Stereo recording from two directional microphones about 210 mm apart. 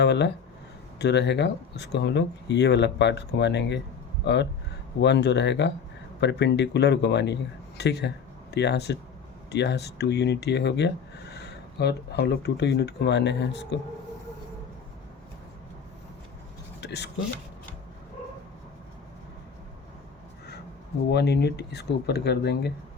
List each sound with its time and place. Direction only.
0.0 s speech: 55° left (ahead or behind)
16.8 s a sound: 55° left (ahead or behind)
21.1 s speech: 50° left (ahead or behind)